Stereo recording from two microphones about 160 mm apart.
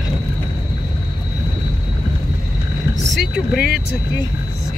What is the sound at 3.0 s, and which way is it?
Speech, 5° right (ahead or behind).